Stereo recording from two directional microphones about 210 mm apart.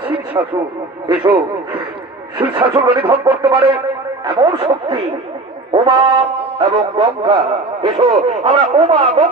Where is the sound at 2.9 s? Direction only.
25° right (ahead or behind).